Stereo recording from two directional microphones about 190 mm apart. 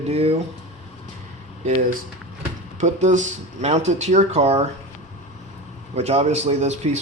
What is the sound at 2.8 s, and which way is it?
Speech, 40° right (ahead or behind).